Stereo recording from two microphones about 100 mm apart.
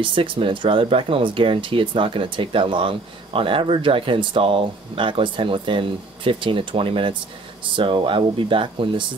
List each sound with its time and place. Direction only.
0.0 s speech: 60° right (ahead or behind)